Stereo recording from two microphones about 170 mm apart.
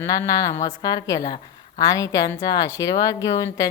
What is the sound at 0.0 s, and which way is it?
Speech, 20° left (ahead or behind).